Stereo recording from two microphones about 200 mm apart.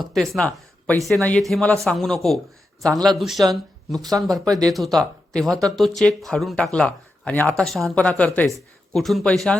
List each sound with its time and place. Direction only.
0.1 s speech: centre (ahead or behind)
4.4 s speech: 20° right (ahead or behind)
4.7 s speech: centre (ahead or behind)